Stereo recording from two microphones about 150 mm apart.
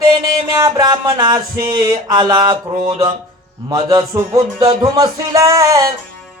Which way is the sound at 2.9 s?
35° right (ahead or behind).